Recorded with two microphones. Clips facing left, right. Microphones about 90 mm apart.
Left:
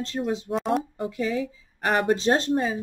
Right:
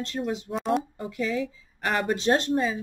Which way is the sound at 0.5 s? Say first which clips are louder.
Even; centre (ahead or behind).